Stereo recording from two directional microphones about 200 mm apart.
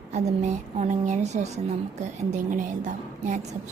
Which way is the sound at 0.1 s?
35° right (ahead or behind).